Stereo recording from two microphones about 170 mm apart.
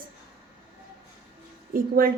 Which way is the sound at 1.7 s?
55° right (ahead or behind).